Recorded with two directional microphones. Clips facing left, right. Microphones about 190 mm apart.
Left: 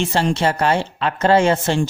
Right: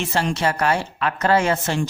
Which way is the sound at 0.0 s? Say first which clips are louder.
Left 3 dB; 30° left (ahead or behind).